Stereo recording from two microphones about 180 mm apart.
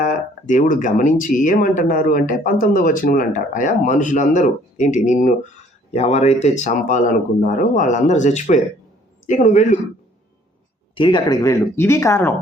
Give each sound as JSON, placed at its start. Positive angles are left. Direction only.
{"t": 0.0, "sound": "speech", "side_deg": 45}
{"t": 10.9, "sound": "speech", "side_deg": 25}